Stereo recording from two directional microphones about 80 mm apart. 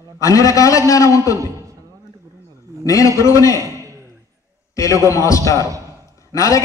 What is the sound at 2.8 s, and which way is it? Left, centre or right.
Speech, left.